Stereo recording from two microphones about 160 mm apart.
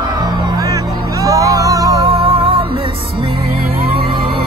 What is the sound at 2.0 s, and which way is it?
Music, 35° right (ahead or behind).